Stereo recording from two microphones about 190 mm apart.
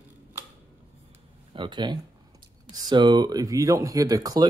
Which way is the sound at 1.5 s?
25° right (ahead or behind).